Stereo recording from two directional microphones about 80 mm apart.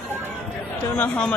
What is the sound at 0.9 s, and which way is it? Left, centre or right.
Speech, left.